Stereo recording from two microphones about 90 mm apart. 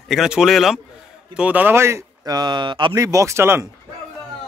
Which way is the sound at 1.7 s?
30° right (ahead or behind).